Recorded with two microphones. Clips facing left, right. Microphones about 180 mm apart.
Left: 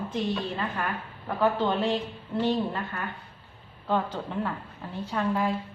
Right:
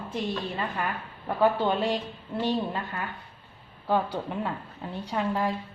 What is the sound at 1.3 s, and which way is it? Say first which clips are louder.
A woman's voice: right 1 dB; 10° right (ahead or behind).